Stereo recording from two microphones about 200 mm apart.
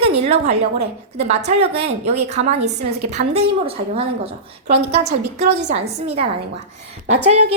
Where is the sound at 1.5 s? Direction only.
30° right (ahead or behind).